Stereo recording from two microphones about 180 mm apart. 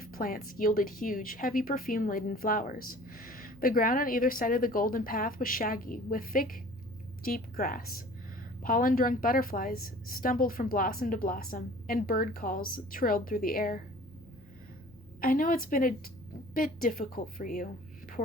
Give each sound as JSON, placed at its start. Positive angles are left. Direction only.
{"t": 0.0, "sound": "speech", "side_deg": 50}
{"t": 15.2, "sound": "speech", "side_deg": 50}